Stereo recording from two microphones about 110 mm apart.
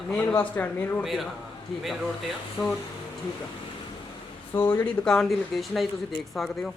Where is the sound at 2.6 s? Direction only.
5° left (ahead or behind).